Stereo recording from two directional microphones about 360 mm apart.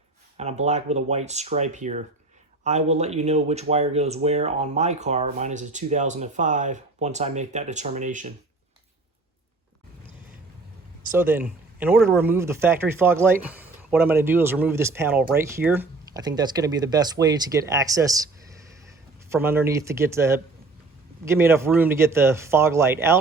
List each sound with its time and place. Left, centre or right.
0.3 s speech: centre
11.1 s speech: centre
19.3 s speech: centre